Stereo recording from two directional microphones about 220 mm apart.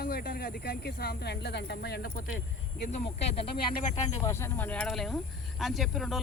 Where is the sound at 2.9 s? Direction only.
25° left (ahead or behind).